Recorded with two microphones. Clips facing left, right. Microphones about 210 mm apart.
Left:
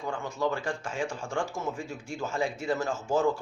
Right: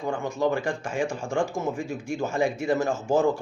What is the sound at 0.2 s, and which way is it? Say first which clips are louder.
Speech: right 5 dB; 15° right (ahead or behind).